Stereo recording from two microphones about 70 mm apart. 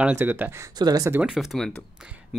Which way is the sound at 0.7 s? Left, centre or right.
Right.